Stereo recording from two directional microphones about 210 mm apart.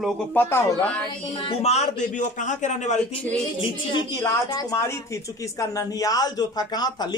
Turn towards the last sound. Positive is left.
turn(degrees=20)  # may be behind; listen again after turning